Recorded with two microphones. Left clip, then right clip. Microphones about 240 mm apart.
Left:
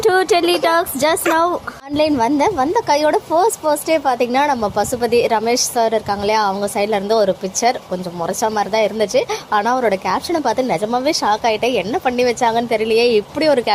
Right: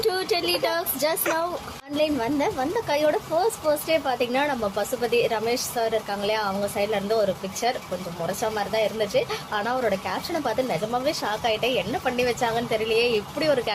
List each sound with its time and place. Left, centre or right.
0.0 s speech: left